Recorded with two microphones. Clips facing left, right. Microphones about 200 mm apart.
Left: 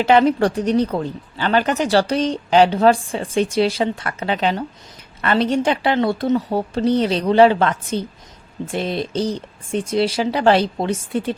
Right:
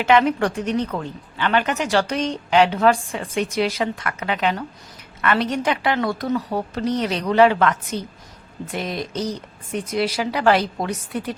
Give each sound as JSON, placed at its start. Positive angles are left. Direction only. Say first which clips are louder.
{"t": 0.0, "sound": "a woman's voice", "louder": "left 3 dB", "side_deg": 35}